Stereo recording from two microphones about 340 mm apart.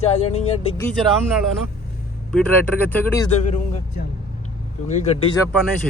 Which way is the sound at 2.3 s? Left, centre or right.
Centre.